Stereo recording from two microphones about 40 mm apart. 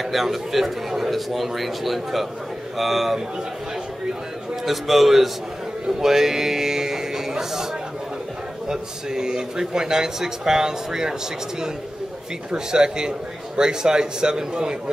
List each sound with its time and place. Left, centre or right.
0.0 s speech: centre
4.6 s speech: centre
5.9 s music: centre
8.6 s speech: centre
12.4 s a man's voice: centre